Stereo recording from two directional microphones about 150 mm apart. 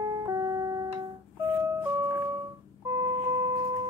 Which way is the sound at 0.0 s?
20° right (ahead or behind).